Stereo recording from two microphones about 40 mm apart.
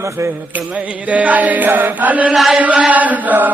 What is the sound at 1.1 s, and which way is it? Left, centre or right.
Speech, right.